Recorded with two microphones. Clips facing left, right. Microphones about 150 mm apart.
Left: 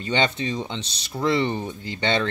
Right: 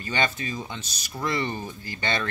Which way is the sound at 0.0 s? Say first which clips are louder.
Left 4 dB; 25° left (ahead or behind).